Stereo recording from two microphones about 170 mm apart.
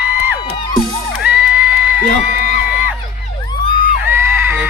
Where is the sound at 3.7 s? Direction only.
50° left (ahead or behind).